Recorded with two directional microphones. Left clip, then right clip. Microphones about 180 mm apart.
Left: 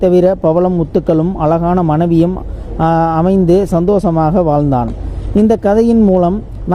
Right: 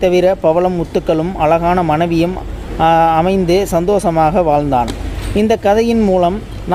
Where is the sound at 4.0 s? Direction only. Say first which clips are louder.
Right 1 dB; 15° left (ahead or behind).